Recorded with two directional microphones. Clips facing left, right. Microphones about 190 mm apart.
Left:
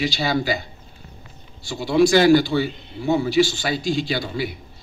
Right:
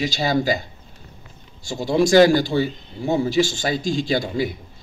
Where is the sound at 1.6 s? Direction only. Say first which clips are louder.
Left 2 dB; 45° right (ahead or behind).